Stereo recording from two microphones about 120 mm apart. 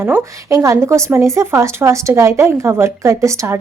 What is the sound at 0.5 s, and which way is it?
A woman's voice, 25° right (ahead or behind).